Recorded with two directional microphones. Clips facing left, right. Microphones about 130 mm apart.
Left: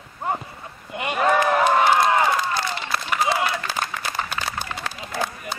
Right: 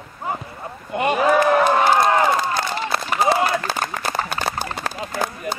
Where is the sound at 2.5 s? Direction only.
40° right (ahead or behind).